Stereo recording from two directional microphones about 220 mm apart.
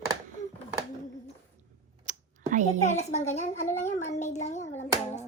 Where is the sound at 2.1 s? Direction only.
35° right (ahead or behind).